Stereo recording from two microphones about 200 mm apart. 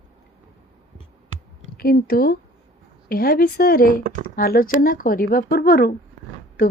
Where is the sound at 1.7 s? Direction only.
50° left (ahead or behind).